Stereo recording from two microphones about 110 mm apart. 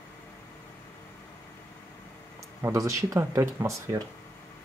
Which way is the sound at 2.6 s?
25° right (ahead or behind).